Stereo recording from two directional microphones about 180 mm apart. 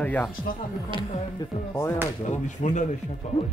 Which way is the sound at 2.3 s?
40° left (ahead or behind).